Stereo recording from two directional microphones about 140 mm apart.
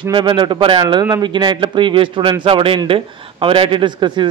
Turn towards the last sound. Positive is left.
turn(degrees=-35)  # may be behind; listen again after turning